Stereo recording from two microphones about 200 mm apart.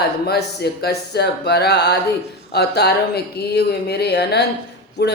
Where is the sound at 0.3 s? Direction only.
55° left (ahead or behind).